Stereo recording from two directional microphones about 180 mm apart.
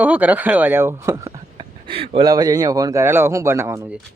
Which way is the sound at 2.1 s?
20° right (ahead or behind).